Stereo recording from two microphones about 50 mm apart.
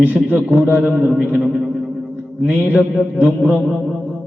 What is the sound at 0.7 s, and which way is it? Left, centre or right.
Speech, right.